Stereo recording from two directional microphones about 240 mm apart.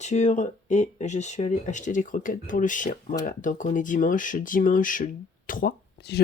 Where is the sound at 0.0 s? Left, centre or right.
Left.